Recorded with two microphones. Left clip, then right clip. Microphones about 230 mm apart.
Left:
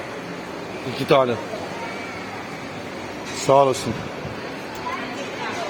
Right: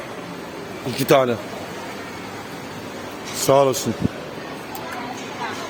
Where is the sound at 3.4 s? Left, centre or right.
Right.